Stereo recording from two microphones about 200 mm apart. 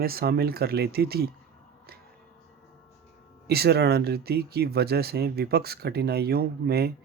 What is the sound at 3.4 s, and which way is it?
Speech, 50° right (ahead or behind).